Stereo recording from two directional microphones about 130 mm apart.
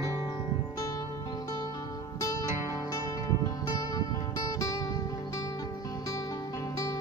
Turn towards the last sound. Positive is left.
turn(degrees=25)  # may be behind; listen again after turning